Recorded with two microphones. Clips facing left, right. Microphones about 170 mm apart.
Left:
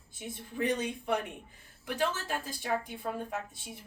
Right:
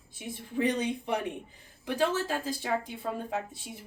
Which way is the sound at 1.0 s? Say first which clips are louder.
Right 1 dB; 20° right (ahead or behind).